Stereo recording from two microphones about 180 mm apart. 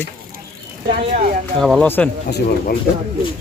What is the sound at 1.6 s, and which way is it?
Speech, centre (ahead or behind).